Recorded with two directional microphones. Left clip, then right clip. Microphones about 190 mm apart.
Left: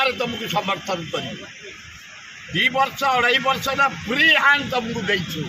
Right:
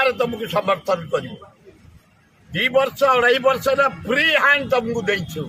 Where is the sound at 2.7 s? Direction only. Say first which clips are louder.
Right 3 dB; 25° right (ahead or behind).